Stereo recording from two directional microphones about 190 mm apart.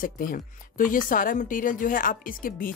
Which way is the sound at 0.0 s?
45° left (ahead or behind).